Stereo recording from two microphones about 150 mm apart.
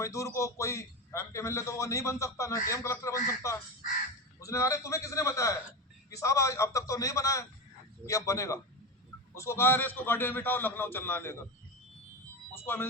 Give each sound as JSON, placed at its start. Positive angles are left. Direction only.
{"t": 0.0, "sound": "a man's voice", "side_deg": 20}
{"t": 12.5, "sound": "a man's voice", "side_deg": 15}